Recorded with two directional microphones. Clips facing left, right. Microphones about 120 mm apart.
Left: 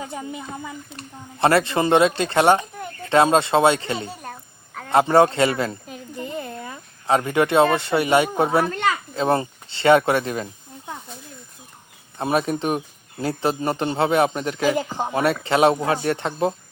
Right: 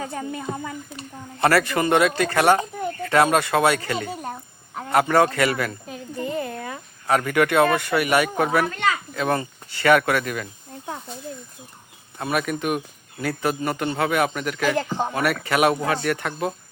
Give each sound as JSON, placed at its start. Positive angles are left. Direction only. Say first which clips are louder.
{"t": 0.0, "sound": "speech", "louder": "right 2 dB", "side_deg": 15}
{"t": 7.1, "sound": "speech", "louder": "left 1 dB", "side_deg": 25}
{"t": 12.2, "sound": "speech", "louder": "left 3 dB", "side_deg": 30}
{"t": 14.8, "sound": "speech", "louder": "right 1 dB", "side_deg": 10}
{"t": 15.1, "sound": "speech", "louder": "left 5 dB", "side_deg": 25}